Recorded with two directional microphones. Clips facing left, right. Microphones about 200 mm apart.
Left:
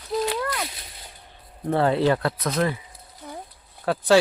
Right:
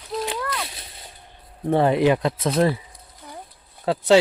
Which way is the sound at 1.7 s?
15° right (ahead or behind).